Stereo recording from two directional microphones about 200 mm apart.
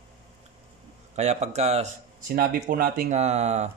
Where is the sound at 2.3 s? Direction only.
45° right (ahead or behind).